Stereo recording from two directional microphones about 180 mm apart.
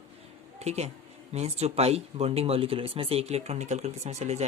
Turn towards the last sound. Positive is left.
turn(degrees=-40)  # may be behind; listen again after turning